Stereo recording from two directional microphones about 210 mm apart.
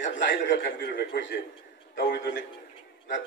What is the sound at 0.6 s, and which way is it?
A man's voice, 50° left (ahead or behind).